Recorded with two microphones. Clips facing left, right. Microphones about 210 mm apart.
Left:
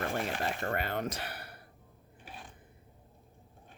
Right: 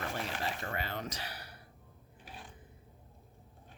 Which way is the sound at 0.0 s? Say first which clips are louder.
Left 4 dB; 50° left (ahead or behind).